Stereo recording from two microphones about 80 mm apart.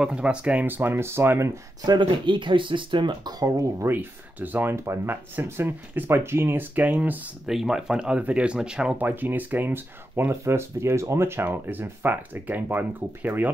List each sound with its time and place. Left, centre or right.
0.0 s speech: centre; by 1.6 s right
1.9 s speech: right
3.3 s speech: right
3.8 s speech: right
7.4 s speech: centre
8.9 s speech: right